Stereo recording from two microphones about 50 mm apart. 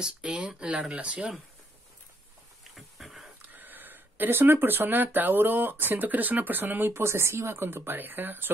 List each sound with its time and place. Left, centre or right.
0.0 s speech: centre
2.7 s a sound: centre
3.4 s speech: right
6.9 s speech: right